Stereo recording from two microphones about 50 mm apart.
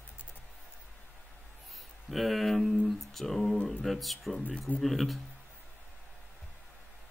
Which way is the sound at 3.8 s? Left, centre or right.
Centre.